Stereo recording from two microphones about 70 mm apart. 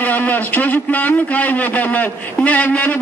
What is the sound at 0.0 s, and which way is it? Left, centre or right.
A man's voice, left.